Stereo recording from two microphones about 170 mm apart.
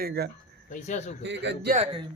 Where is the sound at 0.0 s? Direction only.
70° right (ahead or behind).